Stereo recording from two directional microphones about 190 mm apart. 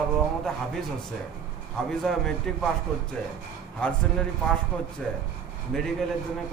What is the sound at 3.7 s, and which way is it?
A man's voice, 5° left (ahead or behind).